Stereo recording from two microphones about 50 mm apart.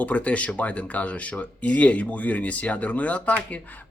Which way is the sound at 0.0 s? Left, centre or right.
Left.